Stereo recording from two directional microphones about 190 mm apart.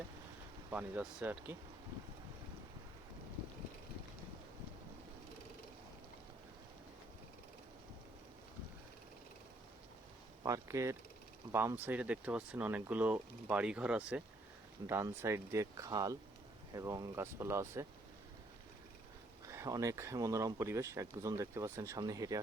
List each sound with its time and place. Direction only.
0.7 s speech: 10° right (ahead or behind)
10.4 s speech: 15° right (ahead or behind)
19.5 s speech: 15° right (ahead or behind)